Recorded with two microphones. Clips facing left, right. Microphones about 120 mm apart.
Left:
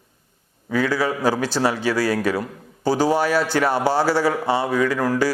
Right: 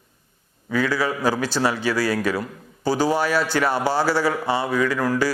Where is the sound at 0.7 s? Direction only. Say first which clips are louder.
Left 1 dB; 45° left (ahead or behind).